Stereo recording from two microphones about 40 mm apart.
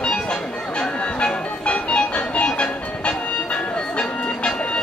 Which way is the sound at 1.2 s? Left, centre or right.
Left.